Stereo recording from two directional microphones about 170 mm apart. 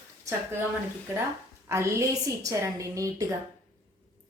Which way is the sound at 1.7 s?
15° right (ahead or behind).